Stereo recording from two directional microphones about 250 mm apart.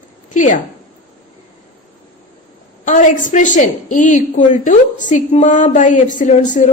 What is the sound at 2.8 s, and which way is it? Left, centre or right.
A woman's voice, left.